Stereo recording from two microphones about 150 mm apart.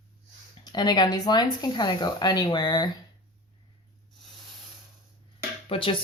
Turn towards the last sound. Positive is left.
turn(degrees=35)  # may be behind; listen again after turning